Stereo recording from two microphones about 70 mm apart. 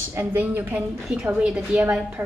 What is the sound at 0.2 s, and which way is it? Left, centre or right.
Speech, right.